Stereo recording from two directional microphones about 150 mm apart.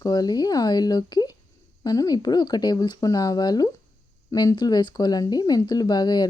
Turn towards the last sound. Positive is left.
turn(degrees=30)  # may be behind; listen again after turning